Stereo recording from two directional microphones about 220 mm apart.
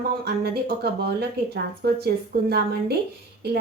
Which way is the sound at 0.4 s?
45° right (ahead or behind).